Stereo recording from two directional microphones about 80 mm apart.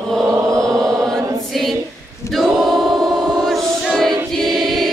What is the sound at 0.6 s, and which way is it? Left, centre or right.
Choir, centre.